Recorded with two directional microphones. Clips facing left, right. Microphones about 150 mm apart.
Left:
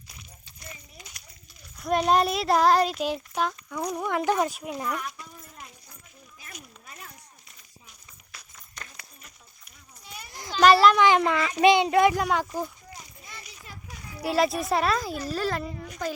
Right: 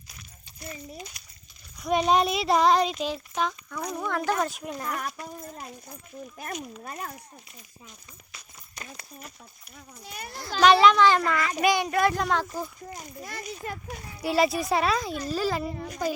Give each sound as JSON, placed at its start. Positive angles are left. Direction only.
{"t": 1.8, "sound": "a child's voice", "side_deg": 0}
{"t": 4.6, "sound": "a child's voice", "side_deg": 5}
{"t": 5.2, "sound": "speech", "side_deg": -40}
{"t": 6.4, "sound": "a child's voice", "side_deg": -60}
{"t": 8.8, "sound": "a sound", "side_deg": -10}
{"t": 9.7, "sound": "a child's voice", "side_deg": -55}
{"t": 10.6, "sound": "a child's voice", "side_deg": 5}
{"t": 10.9, "sound": "a child's voice", "side_deg": 15}
{"t": 12.1, "sound": "speech", "side_deg": 10}
{"t": 12.9, "sound": "a child's voice", "side_deg": -55}
{"t": 14.2, "sound": "a child's voice", "side_deg": 0}
{"t": 15.7, "sound": "speech", "side_deg": -40}